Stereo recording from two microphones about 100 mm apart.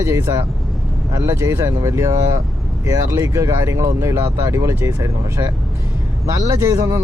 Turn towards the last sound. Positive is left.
turn(degrees=-35)  # may be behind; listen again after turning